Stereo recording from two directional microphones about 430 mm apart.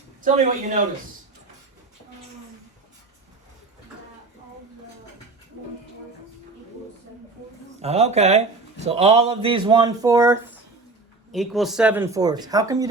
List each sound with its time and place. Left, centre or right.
0.2 s speech: centre
7.8 s speech: centre